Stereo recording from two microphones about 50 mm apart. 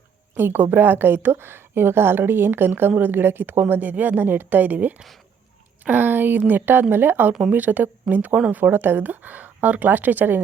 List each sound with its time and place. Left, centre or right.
0.3 s a woman's voice: right